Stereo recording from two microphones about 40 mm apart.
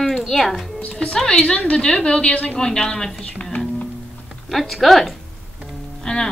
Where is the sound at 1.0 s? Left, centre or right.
Left.